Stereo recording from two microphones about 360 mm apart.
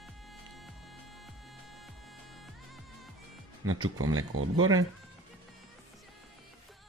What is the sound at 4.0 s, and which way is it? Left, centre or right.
Speech, right.